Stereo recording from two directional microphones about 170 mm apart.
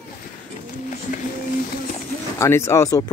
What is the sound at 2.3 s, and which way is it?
Speech, 15° left (ahead or behind).